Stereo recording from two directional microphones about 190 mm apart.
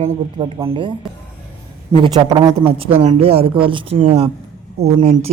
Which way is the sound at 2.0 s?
20° right (ahead or behind).